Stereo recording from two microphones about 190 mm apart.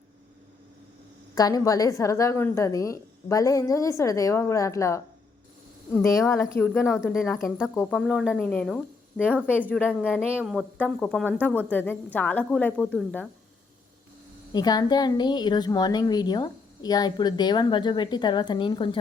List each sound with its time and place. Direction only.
1.4 s a woman's voice: 20° left (ahead or behind)
6.2 s a woman's voice: 15° left (ahead or behind)
14.5 s a woman's voice: 20° left (ahead or behind)